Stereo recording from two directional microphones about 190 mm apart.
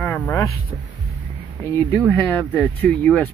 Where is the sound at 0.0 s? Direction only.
10° left (ahead or behind).